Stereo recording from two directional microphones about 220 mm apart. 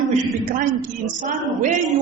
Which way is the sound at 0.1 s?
35° right (ahead or behind).